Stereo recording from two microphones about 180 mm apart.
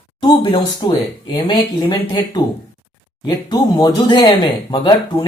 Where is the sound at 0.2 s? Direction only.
25° left (ahead or behind).